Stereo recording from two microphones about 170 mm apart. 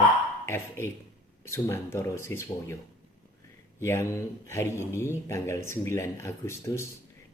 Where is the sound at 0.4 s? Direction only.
15° left (ahead or behind).